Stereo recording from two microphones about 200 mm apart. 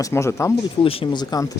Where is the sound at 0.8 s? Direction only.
25° left (ahead or behind).